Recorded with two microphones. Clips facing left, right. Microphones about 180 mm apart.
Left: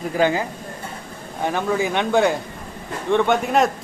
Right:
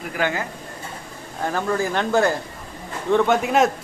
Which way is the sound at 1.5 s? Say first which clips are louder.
Left 1 dB; centre (ahead or behind).